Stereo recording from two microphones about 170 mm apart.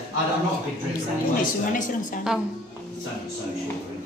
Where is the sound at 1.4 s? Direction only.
50° left (ahead or behind).